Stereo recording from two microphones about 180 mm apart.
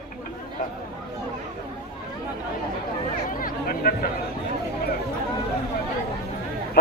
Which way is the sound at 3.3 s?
50° left (ahead or behind).